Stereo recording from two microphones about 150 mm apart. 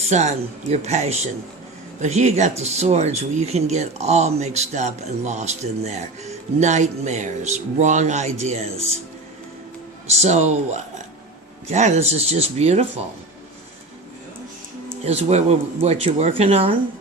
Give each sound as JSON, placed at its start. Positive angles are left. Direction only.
{"t": 0.1, "sound": "speech", "side_deg": -50}
{"t": 10.2, "sound": "speech", "side_deg": -45}
{"t": 15.0, "sound": "speech", "side_deg": -45}